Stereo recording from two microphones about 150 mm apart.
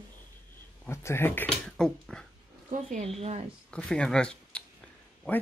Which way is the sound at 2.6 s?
55° right (ahead or behind).